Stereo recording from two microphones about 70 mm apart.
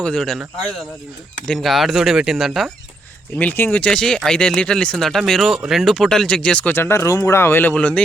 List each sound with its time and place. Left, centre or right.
0.2 s speech: centre
1.5 s speech: centre
3.3 s speech: centre
6.7 s speech: left
7.7 s speech: centre